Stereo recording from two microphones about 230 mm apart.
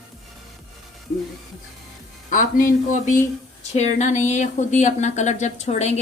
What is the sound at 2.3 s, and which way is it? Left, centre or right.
Speech, left.